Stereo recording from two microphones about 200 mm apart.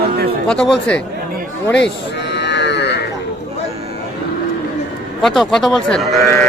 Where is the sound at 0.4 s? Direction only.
5° left (ahead or behind).